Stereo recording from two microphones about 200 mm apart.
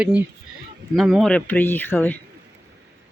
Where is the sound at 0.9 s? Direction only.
Centre (ahead or behind).